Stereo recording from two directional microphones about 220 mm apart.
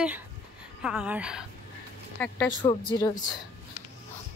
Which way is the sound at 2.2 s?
5° left (ahead or behind).